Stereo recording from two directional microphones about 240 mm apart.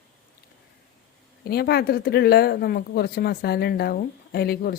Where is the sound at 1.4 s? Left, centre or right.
Left.